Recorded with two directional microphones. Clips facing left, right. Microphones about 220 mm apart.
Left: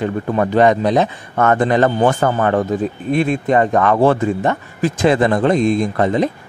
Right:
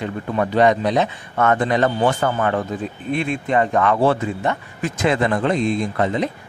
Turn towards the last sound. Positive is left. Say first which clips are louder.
# left 4 dB
turn(degrees=45)  # may be behind; listen again after turning